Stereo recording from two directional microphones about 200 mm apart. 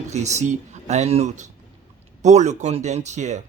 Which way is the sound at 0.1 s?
35° right (ahead or behind).